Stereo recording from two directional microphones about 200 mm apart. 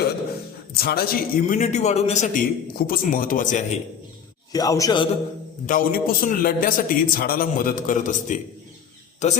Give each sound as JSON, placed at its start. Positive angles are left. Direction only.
{"t": 0.7, "sound": "a man's voice", "side_deg": 50}
{"t": 1.5, "sound": "a man's voice", "side_deg": 35}
{"t": 4.5, "sound": "a man's voice", "side_deg": 15}
{"t": 5.6, "sound": "a man's voice", "side_deg": 45}